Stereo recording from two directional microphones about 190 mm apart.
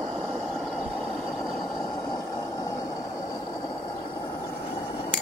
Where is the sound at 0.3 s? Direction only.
Centre (ahead or behind).